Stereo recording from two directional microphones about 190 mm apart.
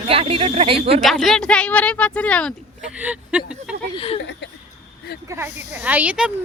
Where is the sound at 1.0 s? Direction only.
Centre (ahead or behind).